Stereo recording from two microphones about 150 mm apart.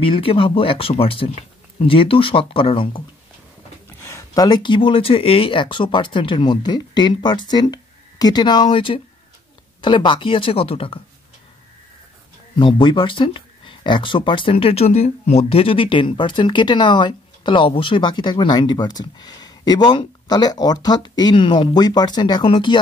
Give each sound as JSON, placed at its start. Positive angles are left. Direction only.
{"t": 0.0, "sound": "speech", "side_deg": 35}
{"t": 4.0, "sound": "speech", "side_deg": 20}
{"t": 12.5, "sound": "speech", "side_deg": 35}